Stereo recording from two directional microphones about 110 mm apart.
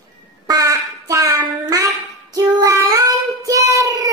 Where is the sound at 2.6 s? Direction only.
30° right (ahead or behind).